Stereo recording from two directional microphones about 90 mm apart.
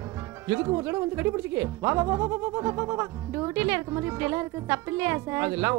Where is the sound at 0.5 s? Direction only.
35° right (ahead or behind).